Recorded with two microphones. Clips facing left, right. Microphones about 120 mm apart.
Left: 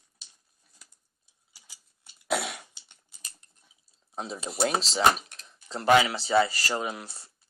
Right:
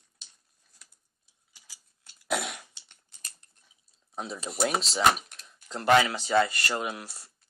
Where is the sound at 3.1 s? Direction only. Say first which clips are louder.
Even; 5° left (ahead or behind).